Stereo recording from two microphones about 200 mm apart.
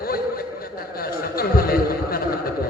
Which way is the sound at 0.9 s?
50° left (ahead or behind).